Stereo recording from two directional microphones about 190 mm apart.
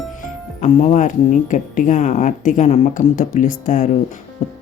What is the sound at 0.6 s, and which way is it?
A woman's voice, 40° left (ahead or behind).